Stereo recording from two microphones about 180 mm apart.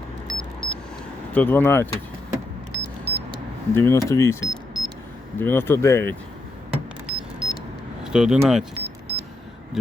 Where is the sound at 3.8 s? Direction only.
15° left (ahead or behind).